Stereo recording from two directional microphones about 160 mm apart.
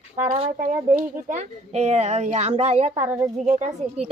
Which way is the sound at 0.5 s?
50° right (ahead or behind).